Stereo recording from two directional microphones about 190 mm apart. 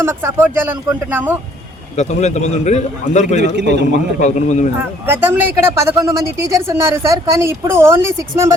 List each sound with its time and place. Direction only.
0.0 s speech: 15° right (ahead or behind)
2.0 s a man's voice: 35° left (ahead or behind)
3.4 s a man's voice: 65° right (ahead or behind)
4.2 s a man's voice: 40° left (ahead or behind)
5.0 s speech: 10° right (ahead or behind)